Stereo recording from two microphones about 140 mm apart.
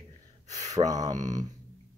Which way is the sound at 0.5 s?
55° right (ahead or behind).